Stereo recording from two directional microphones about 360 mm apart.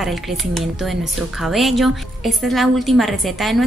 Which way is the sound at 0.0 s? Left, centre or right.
Centre.